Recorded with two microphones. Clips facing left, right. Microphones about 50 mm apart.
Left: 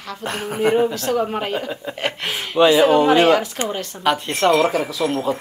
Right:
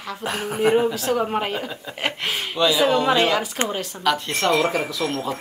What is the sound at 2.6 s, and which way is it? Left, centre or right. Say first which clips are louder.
A woman's voice: left 6 dB; centre.